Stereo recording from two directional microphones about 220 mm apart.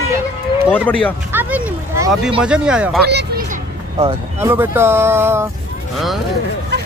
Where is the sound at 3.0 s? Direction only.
50° right (ahead or behind).